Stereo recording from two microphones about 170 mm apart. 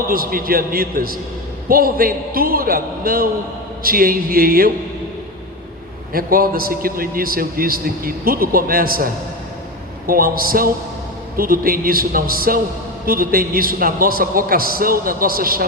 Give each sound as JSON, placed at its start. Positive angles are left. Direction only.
{"t": 0.1, "sound": "a man's voice", "side_deg": -60}
{"t": 6.1, "sound": "a man's voice", "side_deg": -60}
{"t": 10.1, "sound": "a man's voice", "side_deg": -60}